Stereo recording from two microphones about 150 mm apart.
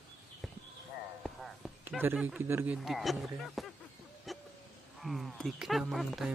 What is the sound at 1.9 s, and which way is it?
A man's voice, 15° right (ahead or behind).